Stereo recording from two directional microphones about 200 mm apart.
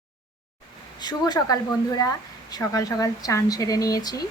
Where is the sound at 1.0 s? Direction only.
20° left (ahead or behind).